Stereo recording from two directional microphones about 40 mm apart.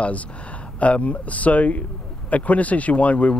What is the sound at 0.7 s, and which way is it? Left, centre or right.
Speech, left.